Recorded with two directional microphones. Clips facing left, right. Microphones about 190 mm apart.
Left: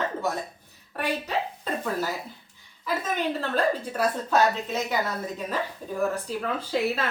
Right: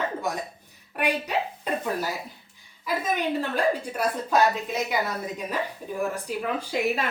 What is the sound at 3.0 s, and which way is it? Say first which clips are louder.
A woman's voice: right 3 dB; 15° right (ahead or behind).